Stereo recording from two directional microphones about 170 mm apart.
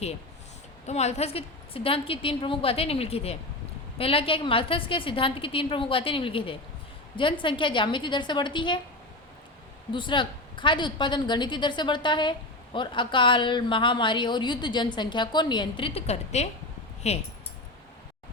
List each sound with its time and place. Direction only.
0.9 s a woman's voice: 40° left (ahead or behind)
9.9 s a woman's voice: 30° left (ahead or behind)